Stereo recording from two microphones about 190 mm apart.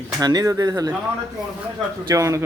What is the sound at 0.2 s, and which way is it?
Speech, 20° right (ahead or behind).